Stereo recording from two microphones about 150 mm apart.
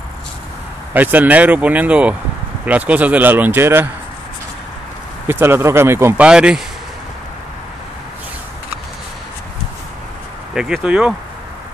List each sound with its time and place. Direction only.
0.9 s a man's voice: 10° right (ahead or behind)
5.3 s a man's voice: 15° right (ahead or behind)
6.2 s a man's voice: 5° right (ahead or behind)
10.5 s speech: 5° right (ahead or behind)